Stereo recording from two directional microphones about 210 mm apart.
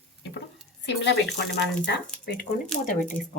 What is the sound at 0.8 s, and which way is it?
Speech, 55° left (ahead or behind).